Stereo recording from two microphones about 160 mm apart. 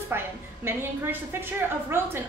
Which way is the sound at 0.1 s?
15° right (ahead or behind).